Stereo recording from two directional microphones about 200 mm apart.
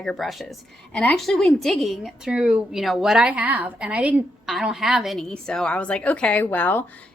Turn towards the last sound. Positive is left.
turn(degrees=10)  # may be behind; listen again after turning